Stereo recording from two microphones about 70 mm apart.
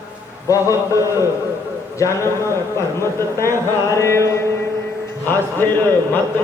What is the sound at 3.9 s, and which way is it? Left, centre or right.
Music, left.